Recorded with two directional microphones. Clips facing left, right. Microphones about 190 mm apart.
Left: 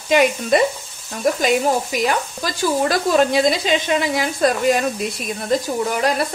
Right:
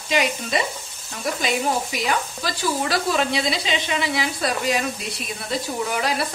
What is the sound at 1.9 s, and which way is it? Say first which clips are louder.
Speech: left 4 dB; 45° left (ahead or behind).